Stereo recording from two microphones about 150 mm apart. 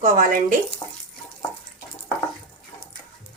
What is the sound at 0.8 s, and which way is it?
Water tap, 35° left (ahead or behind).